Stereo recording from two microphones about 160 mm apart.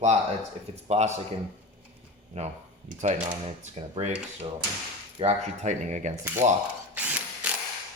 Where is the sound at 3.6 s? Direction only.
45° right (ahead or behind).